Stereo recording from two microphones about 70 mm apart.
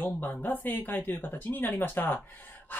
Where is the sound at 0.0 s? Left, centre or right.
Left.